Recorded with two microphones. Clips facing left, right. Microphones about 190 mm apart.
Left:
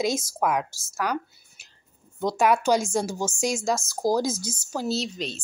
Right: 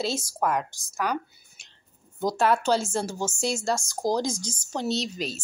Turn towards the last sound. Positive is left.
turn(degrees=-5)  # may be behind; listen again after turning